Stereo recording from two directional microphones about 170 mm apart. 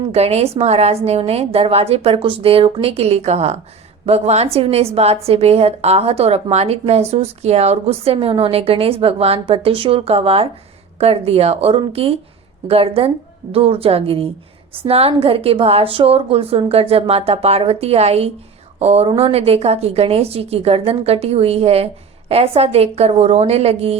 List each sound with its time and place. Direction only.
0.0 s a woman's voice: 35° right (ahead or behind)